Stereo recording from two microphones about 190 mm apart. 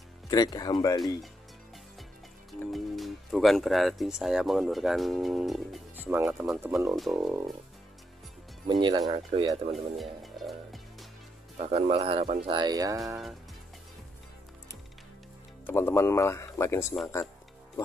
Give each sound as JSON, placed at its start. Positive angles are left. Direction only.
{"t": 0.3, "sound": "speech", "side_deg": 20}
{"t": 2.7, "sound": "speech", "side_deg": 0}
{"t": 8.6, "sound": "speech", "side_deg": -25}
{"t": 9.5, "sound": "music", "side_deg": 0}
{"t": 11.5, "sound": "speech", "side_deg": -35}
{"t": 15.6, "sound": "speech", "side_deg": 10}